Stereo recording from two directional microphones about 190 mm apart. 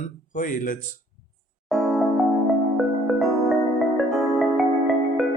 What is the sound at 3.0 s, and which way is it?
Music, centre (ahead or behind).